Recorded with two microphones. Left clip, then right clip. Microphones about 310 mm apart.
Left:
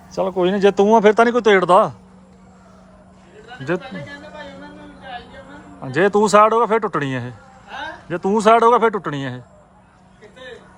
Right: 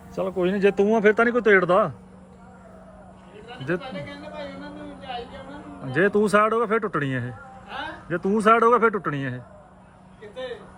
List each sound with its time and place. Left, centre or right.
0.1 s speech: centre
5.9 s speech: centre